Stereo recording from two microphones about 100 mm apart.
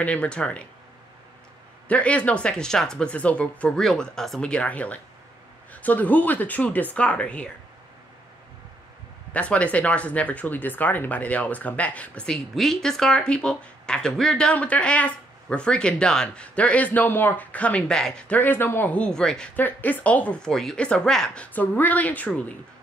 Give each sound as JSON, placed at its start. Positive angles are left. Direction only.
{"t": 0.0, "sound": "speech", "side_deg": 10}
{"t": 1.9, "sound": "speech", "side_deg": 15}
{"t": 9.3, "sound": "speech", "side_deg": 15}
{"t": 18.4, "sound": "speech", "side_deg": 20}
{"t": 18.9, "sound": "speech", "side_deg": 10}
{"t": 21.5, "sound": "speech", "side_deg": 15}